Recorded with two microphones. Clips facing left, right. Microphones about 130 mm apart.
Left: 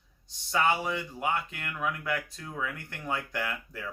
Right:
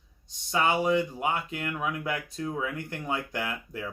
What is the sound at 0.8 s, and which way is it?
Speech, 45° right (ahead or behind).